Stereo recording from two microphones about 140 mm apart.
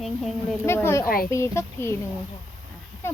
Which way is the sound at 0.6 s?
20° left (ahead or behind).